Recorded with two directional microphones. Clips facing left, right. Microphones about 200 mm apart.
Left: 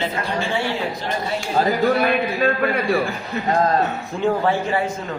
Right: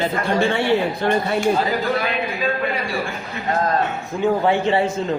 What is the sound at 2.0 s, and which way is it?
Speech, 60° left (ahead or behind).